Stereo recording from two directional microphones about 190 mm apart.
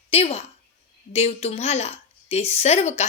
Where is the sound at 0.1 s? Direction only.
30° left (ahead or behind).